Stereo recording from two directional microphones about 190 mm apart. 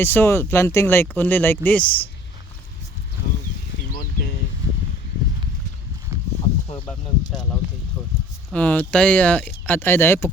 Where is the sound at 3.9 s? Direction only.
50° left (ahead or behind).